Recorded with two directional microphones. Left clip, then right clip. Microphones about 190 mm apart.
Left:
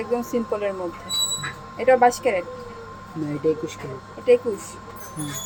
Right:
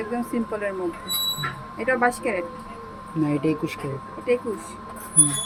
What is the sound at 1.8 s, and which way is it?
Speech, 10° left (ahead or behind).